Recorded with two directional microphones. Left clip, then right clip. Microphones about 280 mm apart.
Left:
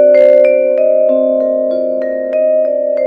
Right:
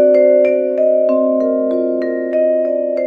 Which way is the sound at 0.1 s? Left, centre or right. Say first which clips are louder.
Left 4 dB; left.